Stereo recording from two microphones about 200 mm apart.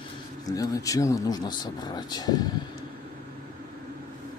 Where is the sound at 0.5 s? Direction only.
15° left (ahead or behind).